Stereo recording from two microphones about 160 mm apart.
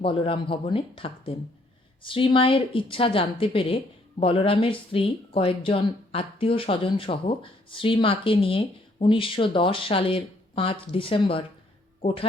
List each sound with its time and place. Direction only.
0.0 s speech: 35° left (ahead or behind)